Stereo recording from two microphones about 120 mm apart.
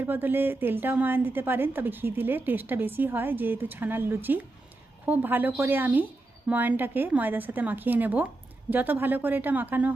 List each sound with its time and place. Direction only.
0.0 s a woman's voice: 15° right (ahead or behind)